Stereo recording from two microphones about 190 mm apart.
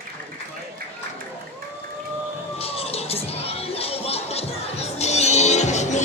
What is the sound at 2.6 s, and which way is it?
Music, 30° left (ahead or behind).